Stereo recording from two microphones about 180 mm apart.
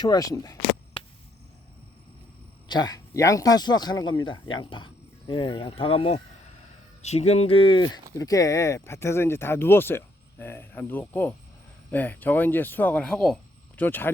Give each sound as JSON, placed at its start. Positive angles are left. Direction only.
{"t": 0.0, "sound": "speech", "side_deg": 20}
{"t": 2.6, "sound": "speech", "side_deg": 20}